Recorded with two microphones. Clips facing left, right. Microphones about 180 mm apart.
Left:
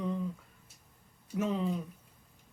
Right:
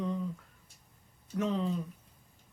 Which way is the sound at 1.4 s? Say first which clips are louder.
Even; 5° left (ahead or behind).